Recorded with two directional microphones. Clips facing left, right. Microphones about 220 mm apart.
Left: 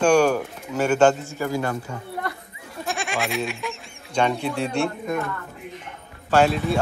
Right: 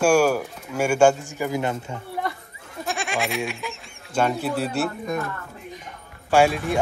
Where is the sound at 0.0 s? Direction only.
10° right (ahead or behind).